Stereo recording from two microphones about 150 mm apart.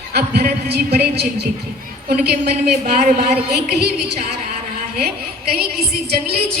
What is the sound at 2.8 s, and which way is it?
Speech, 55° right (ahead or behind).